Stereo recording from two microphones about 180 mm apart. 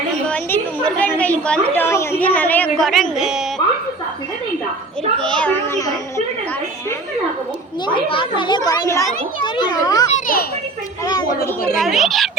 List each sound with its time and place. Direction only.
0.3 s a woman's voice: 5° left (ahead or behind)
5.1 s children playing: 5° left (ahead or behind)
7.9 s a child's voice: 30° left (ahead or behind)
10.1 s a child's voice: 45° left (ahead or behind)
11.0 s a child's voice: 25° left (ahead or behind)
11.8 s a woman's voice: centre (ahead or behind)